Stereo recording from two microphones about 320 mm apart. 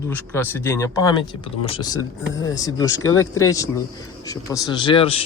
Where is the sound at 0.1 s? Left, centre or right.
Centre.